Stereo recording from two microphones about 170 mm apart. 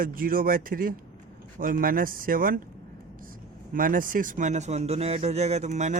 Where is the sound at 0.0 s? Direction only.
55° right (ahead or behind).